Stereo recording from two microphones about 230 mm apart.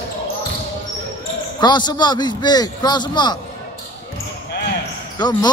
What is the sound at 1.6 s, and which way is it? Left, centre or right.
A man's voice, centre.